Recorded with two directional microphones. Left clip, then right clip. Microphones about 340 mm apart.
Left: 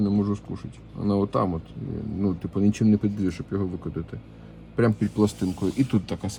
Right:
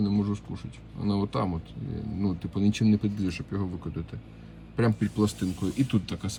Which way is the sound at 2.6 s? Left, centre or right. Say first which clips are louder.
Left 3 dB; centre.